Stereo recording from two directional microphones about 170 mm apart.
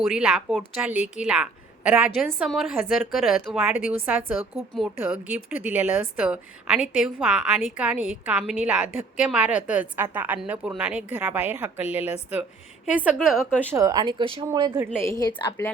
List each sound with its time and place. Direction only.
0.0 s a woman's voice: 5° right (ahead or behind)
13.7 s speech: 20° right (ahead or behind)
15.0 s a woman's voice: 20° left (ahead or behind)